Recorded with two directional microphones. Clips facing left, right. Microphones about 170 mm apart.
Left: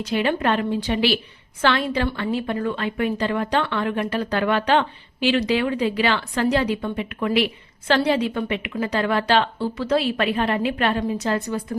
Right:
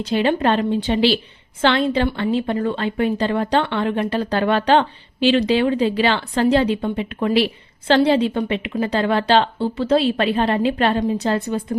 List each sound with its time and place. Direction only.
0.0 s speech: 30° right (ahead or behind)